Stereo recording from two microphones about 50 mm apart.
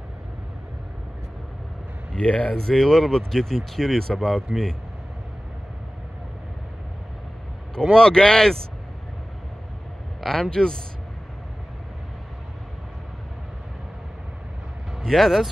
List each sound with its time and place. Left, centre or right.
2.1 s speech: left
2.5 s speech: centre
7.9 s speech: centre
10.2 s speech: centre
15.0 s speech: centre